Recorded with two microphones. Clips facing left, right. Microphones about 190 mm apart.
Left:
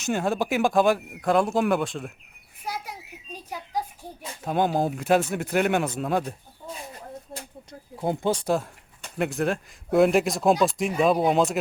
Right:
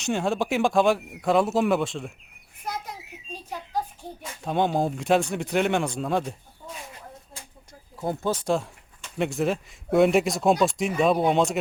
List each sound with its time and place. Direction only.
0.0 s speech: centre (ahead or behind)
2.6 s bird: 10° left (ahead or behind)
3.3 s a sound: 10° left (ahead or behind)
4.4 s speech: centre (ahead or behind)
7.7 s a sound: 20° left (ahead or behind)
8.4 s speech: centre (ahead or behind)